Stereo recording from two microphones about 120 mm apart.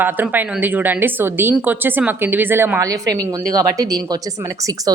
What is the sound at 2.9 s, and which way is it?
A woman's voice, 30° right (ahead or behind).